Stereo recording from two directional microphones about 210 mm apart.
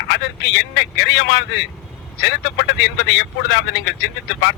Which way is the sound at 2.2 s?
55° left (ahead or behind).